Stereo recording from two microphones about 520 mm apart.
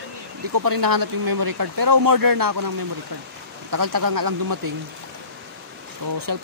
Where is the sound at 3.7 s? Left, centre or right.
Right.